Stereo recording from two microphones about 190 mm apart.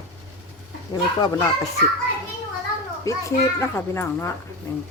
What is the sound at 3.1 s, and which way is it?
A child's voice, 15° left (ahead or behind).